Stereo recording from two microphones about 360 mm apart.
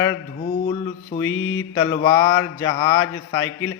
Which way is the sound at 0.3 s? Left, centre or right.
Centre.